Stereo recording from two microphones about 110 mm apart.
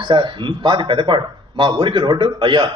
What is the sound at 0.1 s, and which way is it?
Speech, 45° right (ahead or behind).